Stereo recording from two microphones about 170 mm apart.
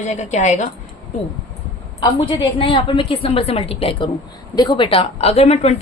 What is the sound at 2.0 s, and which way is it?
A woman's voice, 30° left (ahead or behind).